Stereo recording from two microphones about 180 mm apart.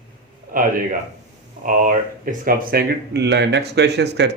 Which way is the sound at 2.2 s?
55° right (ahead or behind).